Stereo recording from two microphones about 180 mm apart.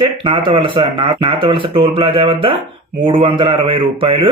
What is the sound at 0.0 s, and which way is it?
Speech, 30° right (ahead or behind).